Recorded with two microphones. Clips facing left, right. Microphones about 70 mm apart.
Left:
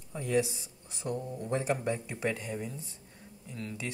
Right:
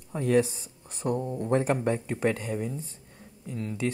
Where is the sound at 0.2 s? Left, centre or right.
Right.